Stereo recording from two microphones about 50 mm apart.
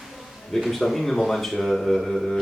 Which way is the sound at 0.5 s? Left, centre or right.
Centre.